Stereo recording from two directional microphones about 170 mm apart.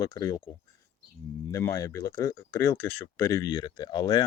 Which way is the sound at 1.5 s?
20° left (ahead or behind).